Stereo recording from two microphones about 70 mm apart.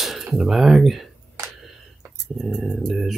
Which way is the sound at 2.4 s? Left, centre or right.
Centre.